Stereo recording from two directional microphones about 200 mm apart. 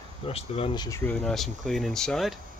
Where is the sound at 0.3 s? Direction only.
30° left (ahead or behind).